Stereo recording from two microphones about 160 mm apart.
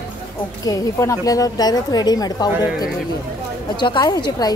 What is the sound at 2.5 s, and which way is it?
Speech, 10° right (ahead or behind).